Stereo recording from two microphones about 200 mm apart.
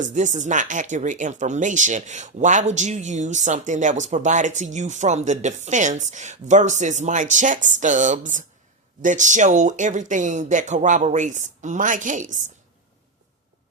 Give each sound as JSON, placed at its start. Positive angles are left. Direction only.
{"t": 0.0, "sound": "speech", "side_deg": -35}